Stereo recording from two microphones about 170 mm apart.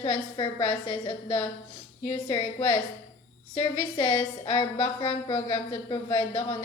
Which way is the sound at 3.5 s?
25° left (ahead or behind).